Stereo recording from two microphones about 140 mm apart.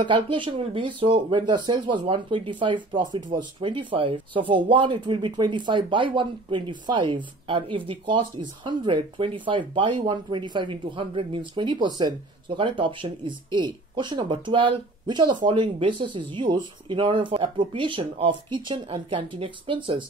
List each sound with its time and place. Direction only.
0.0 s speech: 35° right (ahead or behind)